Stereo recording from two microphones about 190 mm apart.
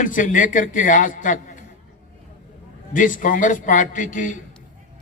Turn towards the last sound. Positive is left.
turn(degrees=45)  # may be behind; listen again after turning